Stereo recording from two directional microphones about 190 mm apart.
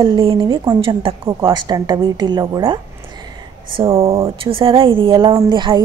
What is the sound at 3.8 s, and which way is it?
Speech, 15° right (ahead or behind).